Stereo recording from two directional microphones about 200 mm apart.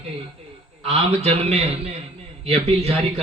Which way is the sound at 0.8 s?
30° right (ahead or behind).